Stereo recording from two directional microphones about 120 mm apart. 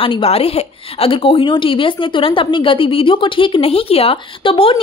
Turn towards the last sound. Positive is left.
turn(degrees=45)  # may be behind; listen again after turning